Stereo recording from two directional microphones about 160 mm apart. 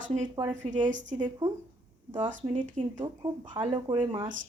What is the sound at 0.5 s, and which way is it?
Speech, 50° right (ahead or behind).